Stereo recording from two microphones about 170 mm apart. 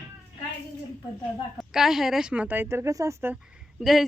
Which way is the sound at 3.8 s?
5° right (ahead or behind).